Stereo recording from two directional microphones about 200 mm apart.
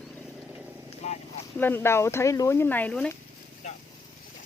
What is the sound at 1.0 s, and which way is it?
Speech, 35° left (ahead or behind).